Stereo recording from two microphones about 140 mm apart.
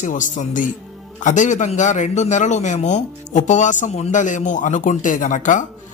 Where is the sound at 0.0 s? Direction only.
65° left (ahead or behind).